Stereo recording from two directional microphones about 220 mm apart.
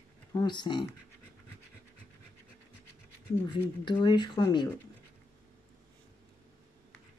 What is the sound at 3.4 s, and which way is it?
Speech, 20° left (ahead or behind).